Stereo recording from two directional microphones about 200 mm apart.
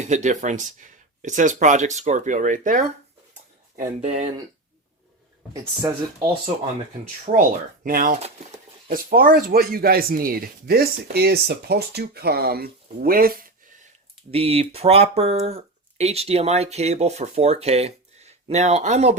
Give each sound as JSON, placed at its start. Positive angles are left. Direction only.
{"t": 0.0, "sound": "speech", "side_deg": -35}
{"t": 5.8, "sound": "speech", "side_deg": -15}
{"t": 7.3, "sound": "speech", "side_deg": -40}
{"t": 14.3, "sound": "speech", "side_deg": -30}